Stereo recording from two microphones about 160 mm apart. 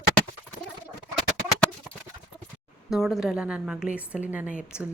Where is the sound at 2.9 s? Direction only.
Centre (ahead or behind).